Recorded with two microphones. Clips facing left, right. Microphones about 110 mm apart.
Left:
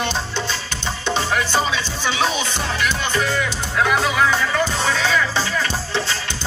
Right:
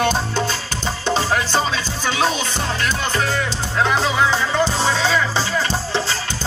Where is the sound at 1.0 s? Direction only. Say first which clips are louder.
Right 1 dB; 35° right (ahead or behind).